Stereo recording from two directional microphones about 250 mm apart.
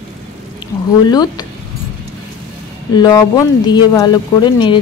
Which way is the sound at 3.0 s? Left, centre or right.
Centre.